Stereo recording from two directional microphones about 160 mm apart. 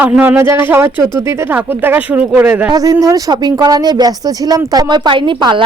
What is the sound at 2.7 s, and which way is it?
Speech, 20° right (ahead or behind).